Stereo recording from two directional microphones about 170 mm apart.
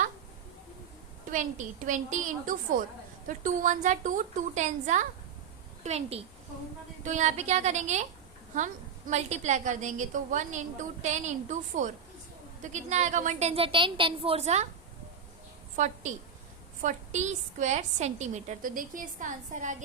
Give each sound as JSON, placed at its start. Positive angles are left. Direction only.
{"t": 1.3, "sound": "a woman's voice", "side_deg": -50}
{"t": 15.7, "sound": "a woman's voice", "side_deg": -45}